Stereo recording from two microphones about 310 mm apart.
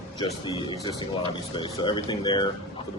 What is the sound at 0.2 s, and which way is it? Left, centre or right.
Speech, centre.